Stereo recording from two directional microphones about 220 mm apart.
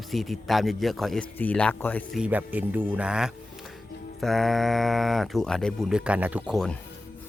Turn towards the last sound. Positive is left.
turn(degrees=0)  # may be behind; listen again after turning